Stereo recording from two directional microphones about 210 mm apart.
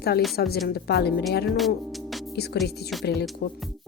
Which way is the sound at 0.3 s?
50° left (ahead or behind).